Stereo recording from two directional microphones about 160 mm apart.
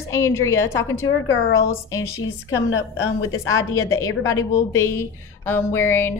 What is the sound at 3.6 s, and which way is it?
A woman's voice, 20° left (ahead or behind).